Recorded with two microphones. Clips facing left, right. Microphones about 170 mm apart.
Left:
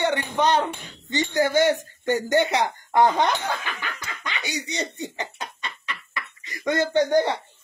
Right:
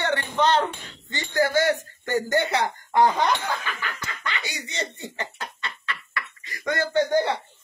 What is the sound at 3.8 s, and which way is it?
Snicker, 20° left (ahead or behind).